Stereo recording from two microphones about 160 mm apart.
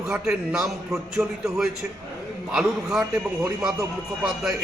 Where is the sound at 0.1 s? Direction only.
5° right (ahead or behind).